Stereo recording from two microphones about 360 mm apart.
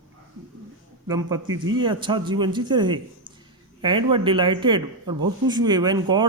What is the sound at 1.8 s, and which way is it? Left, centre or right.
Speech, centre.